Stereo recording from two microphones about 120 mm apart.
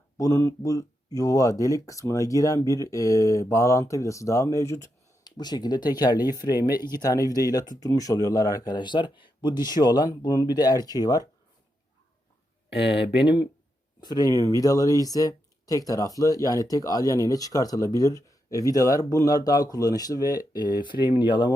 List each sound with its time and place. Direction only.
0.2 s speech: 25° left (ahead or behind)
5.4 s a man's voice: 35° left (ahead or behind)
12.9 s a man's voice: 45° left (ahead or behind)